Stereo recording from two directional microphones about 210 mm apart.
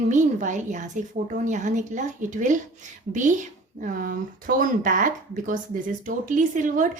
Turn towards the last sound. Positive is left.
turn(degrees=-40)  # may be behind; listen again after turning